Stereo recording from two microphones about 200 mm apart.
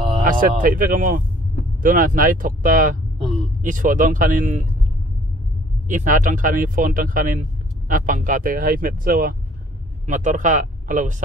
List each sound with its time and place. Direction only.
0.2 s speech: 45° right (ahead or behind)
5.9 s speech: 40° right (ahead or behind)